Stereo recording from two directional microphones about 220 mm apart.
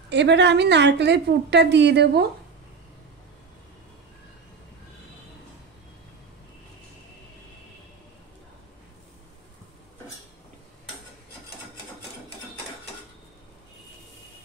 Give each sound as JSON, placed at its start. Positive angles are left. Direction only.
{"t": 0.1, "sound": "a woman's voice", "side_deg": -50}